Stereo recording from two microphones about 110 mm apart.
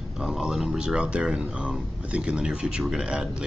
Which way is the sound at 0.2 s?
5° right (ahead or behind).